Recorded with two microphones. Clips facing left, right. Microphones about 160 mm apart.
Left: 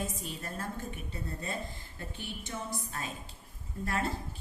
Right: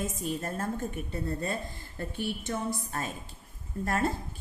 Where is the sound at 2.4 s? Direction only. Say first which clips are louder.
Right 6 dB; 50° right (ahead or behind).